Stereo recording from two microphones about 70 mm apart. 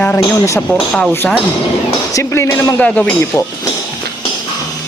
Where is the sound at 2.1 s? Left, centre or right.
Left.